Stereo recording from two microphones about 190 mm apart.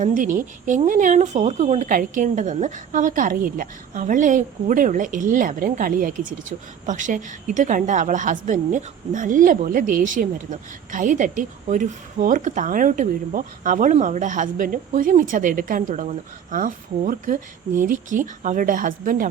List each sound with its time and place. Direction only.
0.0 s a woman's voice: 45° right (ahead or behind)